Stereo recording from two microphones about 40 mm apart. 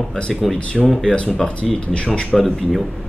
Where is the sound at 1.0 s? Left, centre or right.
Left.